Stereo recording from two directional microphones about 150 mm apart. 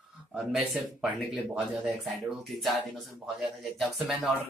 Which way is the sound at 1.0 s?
Centre (ahead or behind).